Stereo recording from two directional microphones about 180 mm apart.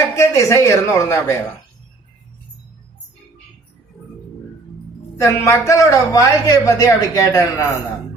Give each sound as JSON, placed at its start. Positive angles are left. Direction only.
{"t": 0.2, "sound": "speech", "side_deg": 15}
{"t": 5.1, "sound": "speech", "side_deg": 15}